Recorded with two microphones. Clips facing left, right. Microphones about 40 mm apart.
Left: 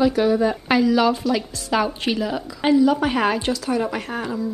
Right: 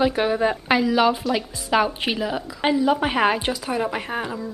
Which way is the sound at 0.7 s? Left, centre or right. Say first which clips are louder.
Left 1 dB; centre.